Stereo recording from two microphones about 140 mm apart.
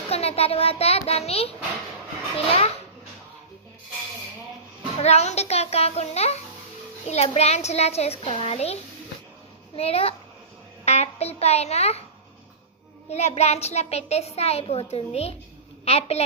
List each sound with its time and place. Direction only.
0.1 s a child's voice: 45° left (ahead or behind)
4.9 s a child's voice: 50° left (ahead or behind)
13.1 s a child's voice: 50° left (ahead or behind)